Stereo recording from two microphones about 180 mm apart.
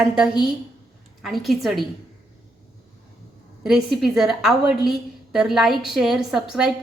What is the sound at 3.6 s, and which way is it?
A woman's voice, centre (ahead or behind).